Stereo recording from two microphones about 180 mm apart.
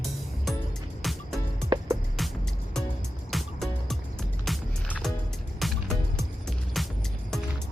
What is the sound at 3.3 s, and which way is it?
Music, centre (ahead or behind).